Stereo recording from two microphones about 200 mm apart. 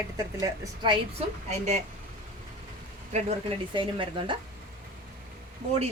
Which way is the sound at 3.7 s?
25° right (ahead or behind).